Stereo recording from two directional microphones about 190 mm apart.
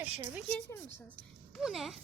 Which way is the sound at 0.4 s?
5° left (ahead or behind).